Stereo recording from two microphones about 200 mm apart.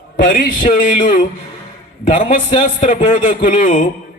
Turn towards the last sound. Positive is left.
turn(degrees=40)  # may be behind; listen again after turning